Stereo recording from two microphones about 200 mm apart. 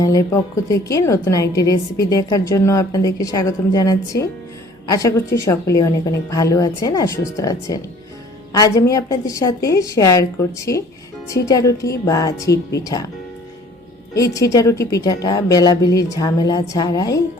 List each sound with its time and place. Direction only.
0.0 s a woman's voice: 15° left (ahead or behind)
11.3 s a woman's voice: 15° left (ahead or behind)
14.2 s a woman's voice: 15° left (ahead or behind)